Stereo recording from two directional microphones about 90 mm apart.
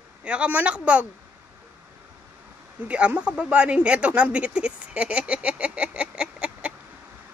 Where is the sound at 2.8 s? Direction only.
15° right (ahead or behind).